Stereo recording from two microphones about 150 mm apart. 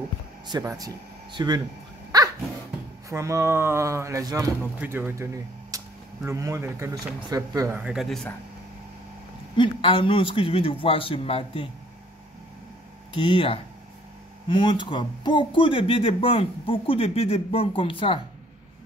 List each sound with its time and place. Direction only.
0.5 s speech: 25° right (ahead or behind)
2.1 s dog: 25° right (ahead or behind)
3.1 s speech: 20° right (ahead or behind)
4.7 s speech: 10° right (ahead or behind)
7.8 s speech: 5° right (ahead or behind)
9.6 s speech: 35° left (ahead or behind)
13.1 s speech: 35° left (ahead or behind)